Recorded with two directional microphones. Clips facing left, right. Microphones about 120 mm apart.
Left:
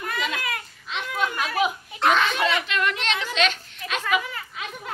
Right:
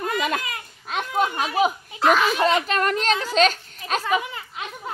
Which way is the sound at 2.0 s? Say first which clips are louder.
Right 2 dB; 5° right (ahead or behind).